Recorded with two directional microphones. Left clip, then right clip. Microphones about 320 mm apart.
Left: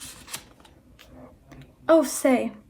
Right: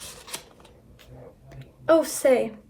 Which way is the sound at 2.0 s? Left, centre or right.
Centre.